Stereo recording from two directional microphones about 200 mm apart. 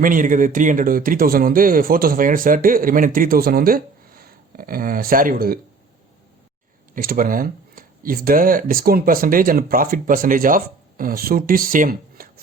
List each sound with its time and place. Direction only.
0.0 s speech: 40° right (ahead or behind)
6.9 s speech: 45° right (ahead or behind)